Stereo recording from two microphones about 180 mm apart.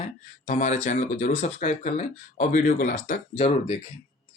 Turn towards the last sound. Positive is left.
turn(degrees=40)  # may be behind; listen again after turning